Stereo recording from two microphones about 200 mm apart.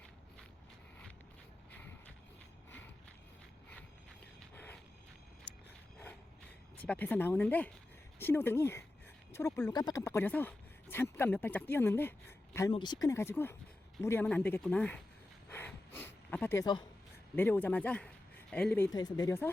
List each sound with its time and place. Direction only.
2.6 s mechanisms: 10° left (ahead or behind)
4.5 s a sound: 10° left (ahead or behind)
6.7 s speech: 5° left (ahead or behind)
12.7 s speech: 20° left (ahead or behind)
15.4 s a sound: 10° left (ahead or behind)
17.3 s speech: 10° left (ahead or behind)
18.9 s speech: 20° left (ahead or behind)